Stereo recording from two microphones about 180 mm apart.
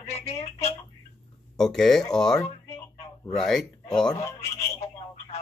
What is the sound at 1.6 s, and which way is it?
Speech, centre (ahead or behind).